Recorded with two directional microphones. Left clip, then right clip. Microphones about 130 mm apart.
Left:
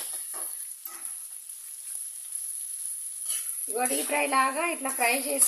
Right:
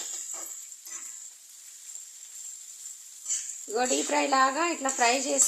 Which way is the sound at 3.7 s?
45° right (ahead or behind).